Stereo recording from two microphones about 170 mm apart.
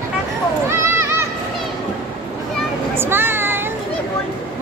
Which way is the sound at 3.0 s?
10° right (ahead or behind).